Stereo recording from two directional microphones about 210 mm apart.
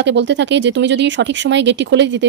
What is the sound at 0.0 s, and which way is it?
Speech, 55° right (ahead or behind).